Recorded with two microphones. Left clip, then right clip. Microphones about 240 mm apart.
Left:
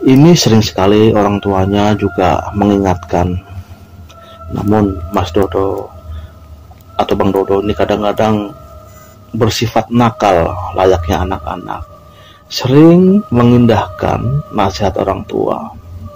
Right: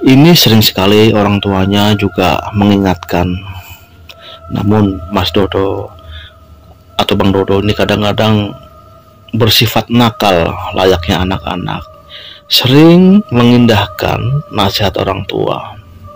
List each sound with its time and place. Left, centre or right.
0.0 s speech: right
4.3 s speech: right
7.0 s speech: right